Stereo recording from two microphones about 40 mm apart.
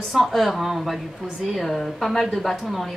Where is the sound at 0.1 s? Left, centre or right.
Centre.